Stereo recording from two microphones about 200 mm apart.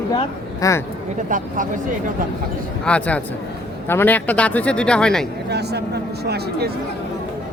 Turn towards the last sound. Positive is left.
turn(degrees=-55)  # may be behind; listen again after turning